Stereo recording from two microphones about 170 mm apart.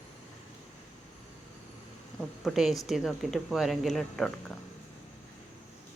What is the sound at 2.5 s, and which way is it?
Speech, centre (ahead or behind).